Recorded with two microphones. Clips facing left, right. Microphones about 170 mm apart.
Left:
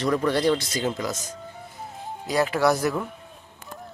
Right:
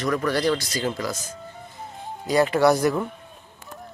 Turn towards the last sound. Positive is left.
turn(degrees=0)  # may be behind; listen again after turning